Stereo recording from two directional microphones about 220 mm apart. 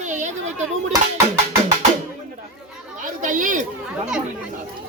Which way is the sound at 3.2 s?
35° right (ahead or behind).